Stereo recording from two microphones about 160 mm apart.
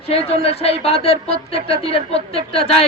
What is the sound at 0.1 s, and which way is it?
Speech, 40° left (ahead or behind).